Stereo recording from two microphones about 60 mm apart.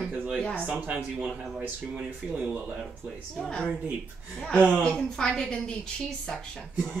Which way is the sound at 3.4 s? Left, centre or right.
Centre.